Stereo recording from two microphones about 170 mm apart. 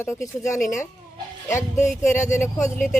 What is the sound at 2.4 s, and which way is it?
Speech, 45° left (ahead or behind).